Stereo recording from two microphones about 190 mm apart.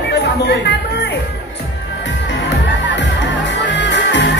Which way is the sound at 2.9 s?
70° left (ahead or behind).